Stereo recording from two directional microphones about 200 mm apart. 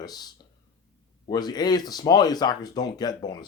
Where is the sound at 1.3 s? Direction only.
20° left (ahead or behind).